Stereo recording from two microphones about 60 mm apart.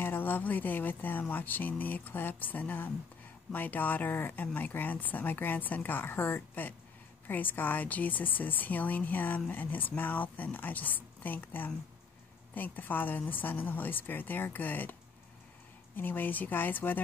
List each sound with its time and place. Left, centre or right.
0.0 s speech: left
16.0 s speech: left